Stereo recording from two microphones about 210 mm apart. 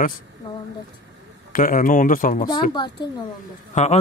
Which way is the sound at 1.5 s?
40° left (ahead or behind).